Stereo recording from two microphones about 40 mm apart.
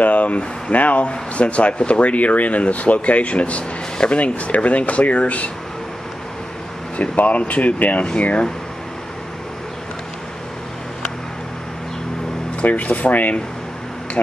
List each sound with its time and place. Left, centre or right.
0.0 s speech: left
7.0 s speech: left
12.6 s speech: left
14.2 s speech: left